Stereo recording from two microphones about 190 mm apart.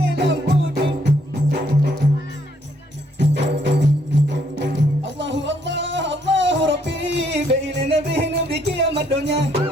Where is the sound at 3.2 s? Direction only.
65° right (ahead or behind).